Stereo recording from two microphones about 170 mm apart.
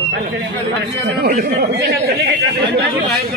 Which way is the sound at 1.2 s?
65° right (ahead or behind).